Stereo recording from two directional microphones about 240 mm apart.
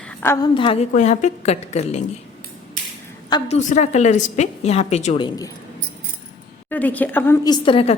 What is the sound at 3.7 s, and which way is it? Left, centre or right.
A woman's voice, left.